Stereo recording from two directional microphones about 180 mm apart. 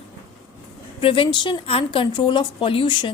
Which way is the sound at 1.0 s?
30° left (ahead or behind).